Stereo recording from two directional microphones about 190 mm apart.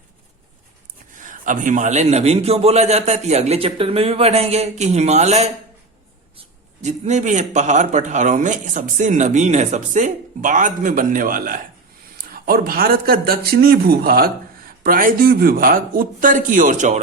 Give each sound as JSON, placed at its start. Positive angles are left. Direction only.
{"t": 1.2, "sound": "speech", "side_deg": -40}
{"t": 6.8, "sound": "speech", "side_deg": -35}